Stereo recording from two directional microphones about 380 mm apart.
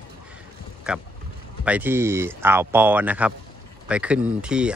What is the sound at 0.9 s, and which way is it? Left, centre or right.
Speech, centre.